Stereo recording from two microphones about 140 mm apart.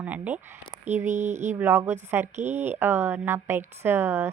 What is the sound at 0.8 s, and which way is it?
Speech, 60° right (ahead or behind).